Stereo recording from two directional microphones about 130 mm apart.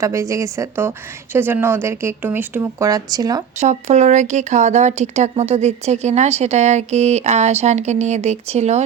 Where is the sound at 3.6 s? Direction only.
60° right (ahead or behind).